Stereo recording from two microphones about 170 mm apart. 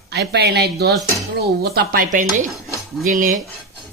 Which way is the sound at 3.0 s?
50° right (ahead or behind).